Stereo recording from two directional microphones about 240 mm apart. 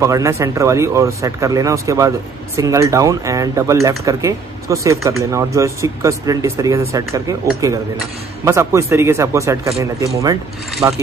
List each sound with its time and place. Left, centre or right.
0.0 s speech: centre